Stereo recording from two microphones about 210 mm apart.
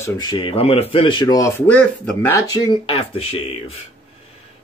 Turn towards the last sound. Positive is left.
turn(degrees=30)  # may be behind; listen again after turning